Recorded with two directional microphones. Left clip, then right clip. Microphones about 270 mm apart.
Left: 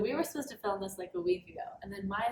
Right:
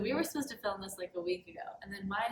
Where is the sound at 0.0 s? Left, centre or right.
Centre.